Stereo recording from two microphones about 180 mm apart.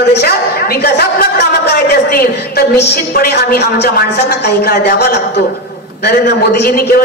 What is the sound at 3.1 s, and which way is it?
A man's voice, 60° left (ahead or behind).